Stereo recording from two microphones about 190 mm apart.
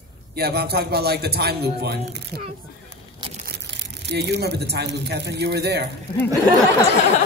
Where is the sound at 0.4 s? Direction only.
55° right (ahead or behind).